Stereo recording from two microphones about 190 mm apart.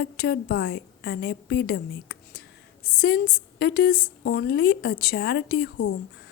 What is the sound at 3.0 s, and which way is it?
Speech, 50° left (ahead or behind).